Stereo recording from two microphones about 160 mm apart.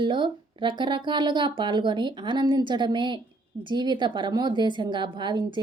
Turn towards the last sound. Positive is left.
turn(degrees=-30)  # may be behind; listen again after turning